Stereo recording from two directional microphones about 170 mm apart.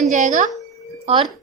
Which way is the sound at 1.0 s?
30° right (ahead or behind).